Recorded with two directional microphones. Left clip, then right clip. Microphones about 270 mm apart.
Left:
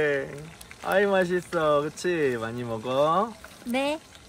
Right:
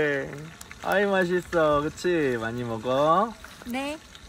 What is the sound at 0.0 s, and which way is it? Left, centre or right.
Speech, centre.